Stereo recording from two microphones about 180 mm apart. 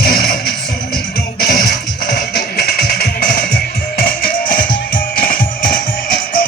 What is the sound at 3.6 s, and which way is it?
Music, 55° left (ahead or behind).